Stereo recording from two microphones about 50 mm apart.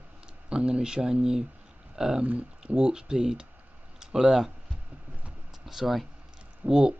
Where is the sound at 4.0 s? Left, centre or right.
Centre.